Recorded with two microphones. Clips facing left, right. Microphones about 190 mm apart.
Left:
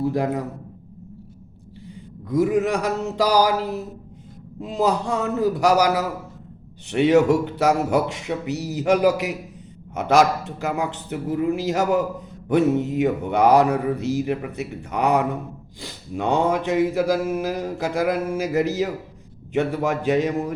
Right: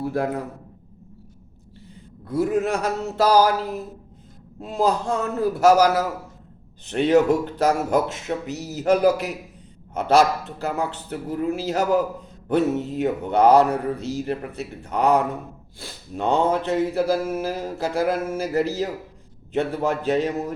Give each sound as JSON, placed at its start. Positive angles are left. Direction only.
{"t": 0.0, "sound": "mantra", "side_deg": 15}
{"t": 2.2, "sound": "mantra", "side_deg": 15}
{"t": 4.6, "sound": "mantra", "side_deg": 15}